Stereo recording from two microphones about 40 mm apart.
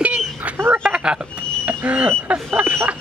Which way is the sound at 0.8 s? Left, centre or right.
Right.